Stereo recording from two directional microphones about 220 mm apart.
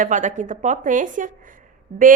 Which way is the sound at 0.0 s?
35° right (ahead or behind).